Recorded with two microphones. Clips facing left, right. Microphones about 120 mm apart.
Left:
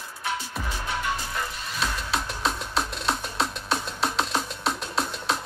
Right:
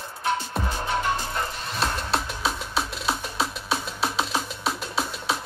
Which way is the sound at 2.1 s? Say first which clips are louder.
Right 1 dB; centre (ahead or behind).